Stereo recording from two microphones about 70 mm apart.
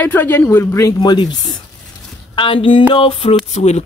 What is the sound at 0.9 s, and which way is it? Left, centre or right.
Speech, left.